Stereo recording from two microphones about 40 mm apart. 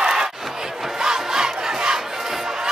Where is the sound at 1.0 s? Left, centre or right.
Centre.